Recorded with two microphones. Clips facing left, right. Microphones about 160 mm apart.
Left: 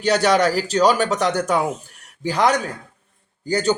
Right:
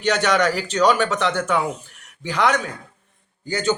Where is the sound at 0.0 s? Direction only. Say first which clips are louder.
Left 2 dB; 35° left (ahead or behind).